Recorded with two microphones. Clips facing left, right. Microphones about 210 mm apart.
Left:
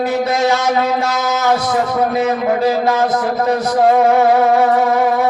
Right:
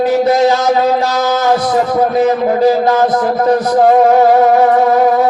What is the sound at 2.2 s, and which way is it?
Music, 25° right (ahead or behind).